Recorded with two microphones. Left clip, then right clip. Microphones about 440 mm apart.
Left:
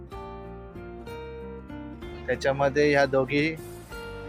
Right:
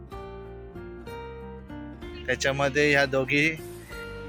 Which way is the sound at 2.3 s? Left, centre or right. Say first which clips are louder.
Left 1 dB; right.